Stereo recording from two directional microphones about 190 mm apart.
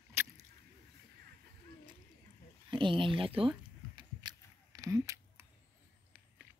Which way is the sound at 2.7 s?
25° right (ahead or behind).